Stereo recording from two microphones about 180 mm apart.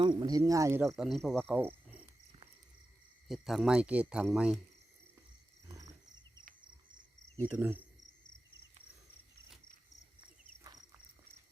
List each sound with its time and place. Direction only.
0.0 s speech: 25° right (ahead or behind)
1.0 s speech: centre (ahead or behind)
1.5 s cricket: 10° right (ahead or behind)
3.2 s speech: centre (ahead or behind)
5.6 s wild animals: 20° right (ahead or behind)
7.3 s speech: 10° right (ahead or behind)